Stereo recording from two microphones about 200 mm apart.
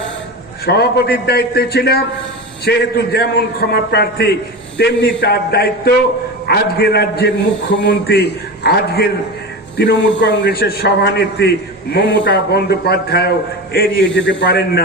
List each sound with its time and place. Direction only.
0.6 s a man's voice: 55° left (ahead or behind)